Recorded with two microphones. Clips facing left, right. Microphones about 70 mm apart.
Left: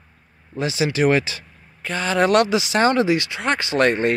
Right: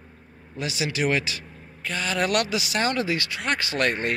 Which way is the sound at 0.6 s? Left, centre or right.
Left.